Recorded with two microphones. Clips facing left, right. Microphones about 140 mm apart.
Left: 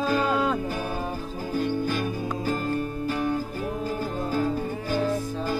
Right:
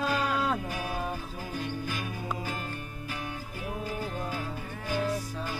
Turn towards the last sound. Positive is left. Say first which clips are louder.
# left 6 dB
turn(degrees=35)  # may be behind; listen again after turning